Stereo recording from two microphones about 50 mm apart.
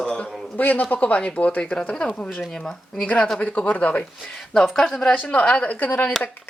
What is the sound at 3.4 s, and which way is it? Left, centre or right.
Speech, left.